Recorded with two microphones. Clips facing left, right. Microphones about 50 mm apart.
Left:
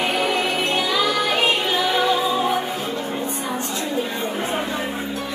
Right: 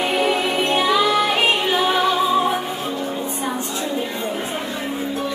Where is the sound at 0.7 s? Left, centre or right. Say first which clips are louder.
Right 6 dB; right.